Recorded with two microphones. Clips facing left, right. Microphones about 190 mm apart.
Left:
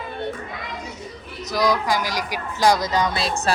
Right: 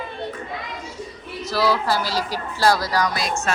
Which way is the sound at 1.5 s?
15° left (ahead or behind).